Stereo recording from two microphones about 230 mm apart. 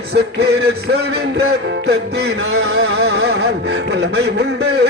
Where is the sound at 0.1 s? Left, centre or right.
Right.